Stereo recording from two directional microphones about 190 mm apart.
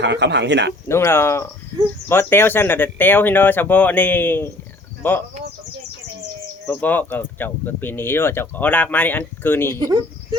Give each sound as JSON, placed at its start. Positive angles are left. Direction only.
{"t": 0.0, "sound": "speech", "side_deg": -65}
{"t": 0.9, "sound": "speech", "side_deg": 15}
{"t": 6.7, "sound": "speech", "side_deg": 10}
{"t": 9.6, "sound": "speech", "side_deg": -20}